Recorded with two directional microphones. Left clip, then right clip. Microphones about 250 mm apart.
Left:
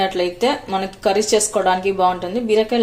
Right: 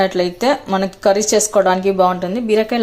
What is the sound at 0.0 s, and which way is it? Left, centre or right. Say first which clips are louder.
Speech: right 2 dB; right.